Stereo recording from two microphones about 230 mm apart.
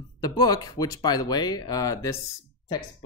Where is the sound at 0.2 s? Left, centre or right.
Centre.